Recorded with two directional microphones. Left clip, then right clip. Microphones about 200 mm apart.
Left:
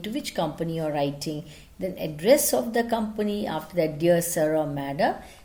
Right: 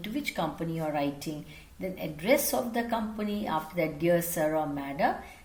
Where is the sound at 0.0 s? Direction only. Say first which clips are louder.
Left 4 dB; 50° left (ahead or behind).